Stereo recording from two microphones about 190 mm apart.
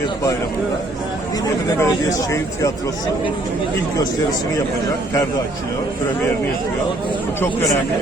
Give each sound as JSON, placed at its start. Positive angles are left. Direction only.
{"t": 1.8, "sound": "speech", "side_deg": 15}